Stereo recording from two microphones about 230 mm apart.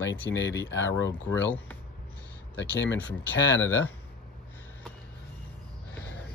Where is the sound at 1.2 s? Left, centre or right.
Centre.